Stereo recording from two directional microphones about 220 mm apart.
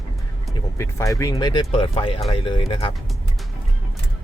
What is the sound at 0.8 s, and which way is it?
Speech, 15° left (ahead or behind).